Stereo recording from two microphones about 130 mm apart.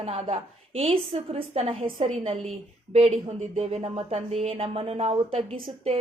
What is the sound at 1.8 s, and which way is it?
Speech, 90° right.